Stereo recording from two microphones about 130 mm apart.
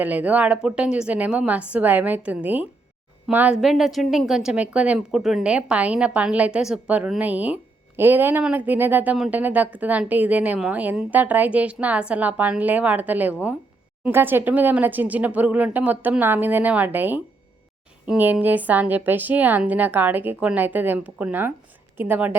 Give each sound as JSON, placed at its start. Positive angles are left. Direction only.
{"t": 0.0, "sound": "a woman's voice", "side_deg": -10}
{"t": 9.1, "sound": "a woman's voice", "side_deg": 0}